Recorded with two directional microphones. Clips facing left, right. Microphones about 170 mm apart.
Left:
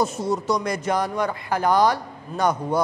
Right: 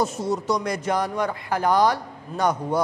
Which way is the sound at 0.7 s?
15° left (ahead or behind).